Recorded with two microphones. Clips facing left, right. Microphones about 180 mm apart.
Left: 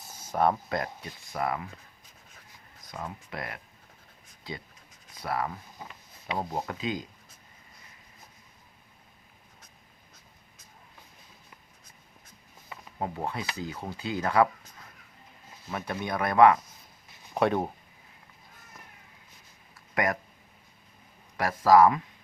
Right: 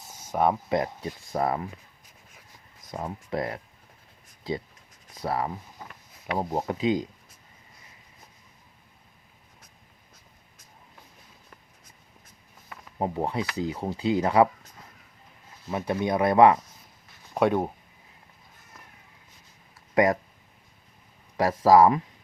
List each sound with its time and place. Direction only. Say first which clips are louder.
0.1 s a sound: right 1 dB; 20° right (ahead or behind)
1.0 s speech: right 5 dB; 35° right (ahead or behind)
2.9 s speech: right 7 dB; 30° right (ahead or behind)
5.2 s speech: right 3 dB; 30° right (ahead or behind)
13.0 s speech: right 5 dB; 25° right (ahead or behind)
15.7 s speech: right 6 dB; 20° right (ahead or behind)
17.3 s speech: right 3 dB; 10° right (ahead or behind)
19.9 s speech: right 7 dB; 25° right (ahead or behind)
21.3 s speech: right 2 dB; 30° right (ahead or behind)